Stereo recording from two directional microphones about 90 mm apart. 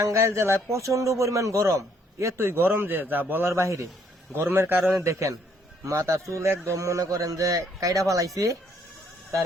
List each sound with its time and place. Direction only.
0.0 s a man's voice: 30° right (ahead or behind)
3.5 s a man's voice: 35° right (ahead or behind)